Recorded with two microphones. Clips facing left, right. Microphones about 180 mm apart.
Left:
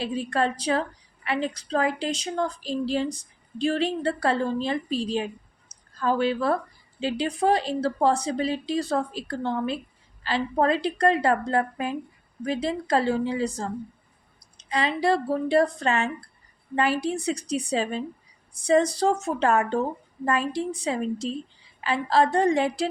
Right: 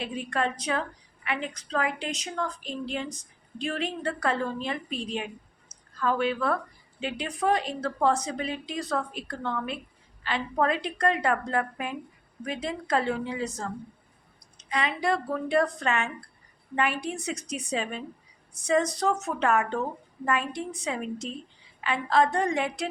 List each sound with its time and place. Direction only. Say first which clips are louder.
0.0 s a woman's voice: left 4 dB; 35° left (ahead or behind)